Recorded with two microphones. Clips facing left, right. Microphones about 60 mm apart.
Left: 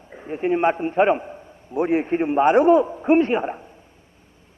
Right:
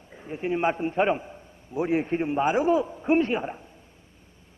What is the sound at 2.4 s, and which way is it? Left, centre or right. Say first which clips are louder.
Speech: left 9 dB; left.